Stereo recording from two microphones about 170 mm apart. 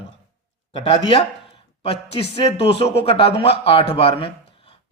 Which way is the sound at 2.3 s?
35° left (ahead or behind).